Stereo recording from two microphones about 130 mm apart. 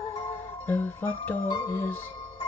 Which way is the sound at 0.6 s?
15° left (ahead or behind).